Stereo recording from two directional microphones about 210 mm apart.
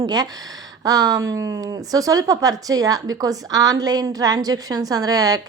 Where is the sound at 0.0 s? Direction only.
20° right (ahead or behind).